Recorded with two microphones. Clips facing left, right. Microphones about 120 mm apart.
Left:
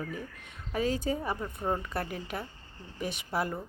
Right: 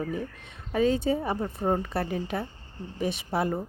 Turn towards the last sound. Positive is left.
turn(degrees=-25)  # may be behind; listen again after turning